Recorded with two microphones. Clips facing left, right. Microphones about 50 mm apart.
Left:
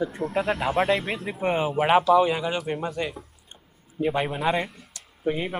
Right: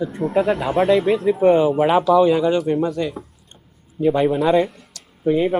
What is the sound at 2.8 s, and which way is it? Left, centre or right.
Speech, left.